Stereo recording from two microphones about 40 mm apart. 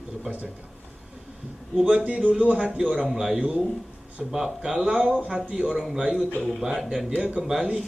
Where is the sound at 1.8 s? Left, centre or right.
Centre.